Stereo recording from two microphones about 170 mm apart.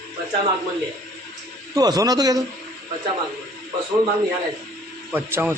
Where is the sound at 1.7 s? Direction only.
20° right (ahead or behind).